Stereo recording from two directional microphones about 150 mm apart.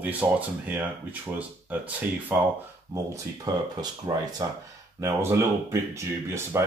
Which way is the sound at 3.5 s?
25° right (ahead or behind).